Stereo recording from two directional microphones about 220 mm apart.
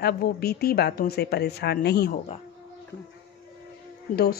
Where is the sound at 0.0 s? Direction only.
45° left (ahead or behind).